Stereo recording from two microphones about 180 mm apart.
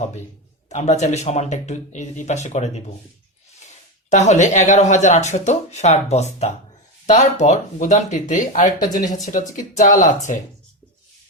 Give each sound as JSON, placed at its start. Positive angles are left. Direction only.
{"t": 0.7, "sound": "speech", "side_deg": 40}
{"t": 4.1, "sound": "speech", "side_deg": 40}
{"t": 8.8, "sound": "speech", "side_deg": 20}
{"t": 9.2, "sound": "speech", "side_deg": 45}